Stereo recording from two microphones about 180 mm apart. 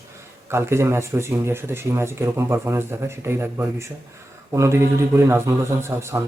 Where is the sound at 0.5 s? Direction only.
15° right (ahead or behind).